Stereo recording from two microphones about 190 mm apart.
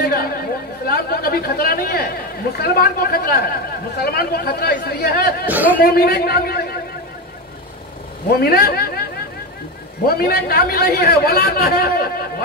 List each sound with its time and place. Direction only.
0.0 s chatter: 55° left (ahead or behind)
2.5 s speech: 55° left (ahead or behind)
5.5 s a man's voice: 10° right (ahead or behind)
5.8 s a man's voice: 55° left (ahead or behind)
8.3 s speech: 55° left (ahead or behind)
10.0 s speech: 55° left (ahead or behind)